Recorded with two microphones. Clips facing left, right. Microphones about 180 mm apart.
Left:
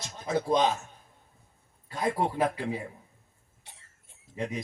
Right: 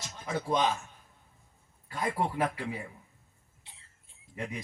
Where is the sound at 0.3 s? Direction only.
35° left (ahead or behind).